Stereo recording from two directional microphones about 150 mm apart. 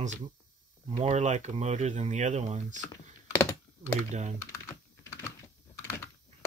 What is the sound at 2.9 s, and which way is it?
Computer keyboard, 20° left (ahead or behind).